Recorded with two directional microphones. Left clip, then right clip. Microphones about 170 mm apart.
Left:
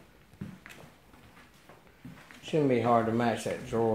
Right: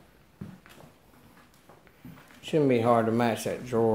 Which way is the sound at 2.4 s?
30° right (ahead or behind).